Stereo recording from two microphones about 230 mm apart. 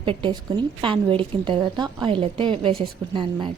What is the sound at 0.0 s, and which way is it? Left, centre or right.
A woman's voice, right.